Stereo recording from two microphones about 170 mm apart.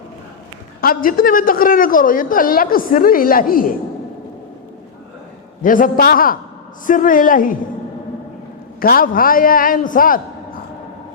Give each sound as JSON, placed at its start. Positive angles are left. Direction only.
{"t": 0.8, "sound": "a woman's voice", "side_deg": 60}
{"t": 5.6, "sound": "a woman's voice", "side_deg": 55}
{"t": 8.8, "sound": "a woman's voice", "side_deg": 55}